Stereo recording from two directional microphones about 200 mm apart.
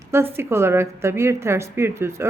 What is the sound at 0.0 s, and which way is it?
A woman's voice, 10° right (ahead or behind).